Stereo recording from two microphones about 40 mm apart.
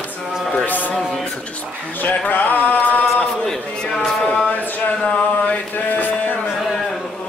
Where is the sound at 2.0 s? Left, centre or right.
Left.